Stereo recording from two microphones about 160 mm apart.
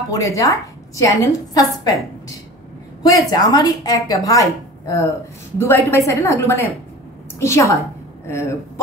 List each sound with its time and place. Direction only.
0.1 s a woman's voice: 20° left (ahead or behind)
3.3 s a woman's voice: 25° left (ahead or behind)